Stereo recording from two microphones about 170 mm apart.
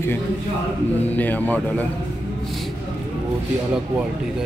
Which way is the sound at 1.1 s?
10° left (ahead or behind).